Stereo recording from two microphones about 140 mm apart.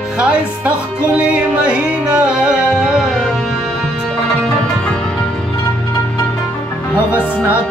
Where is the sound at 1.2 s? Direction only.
10° right (ahead or behind).